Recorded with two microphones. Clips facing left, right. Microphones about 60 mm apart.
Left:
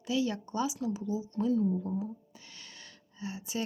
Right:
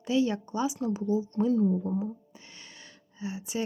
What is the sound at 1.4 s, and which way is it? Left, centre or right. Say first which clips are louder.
Speech: right 2 dB; right.